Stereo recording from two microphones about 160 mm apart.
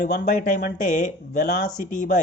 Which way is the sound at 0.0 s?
65° left (ahead or behind).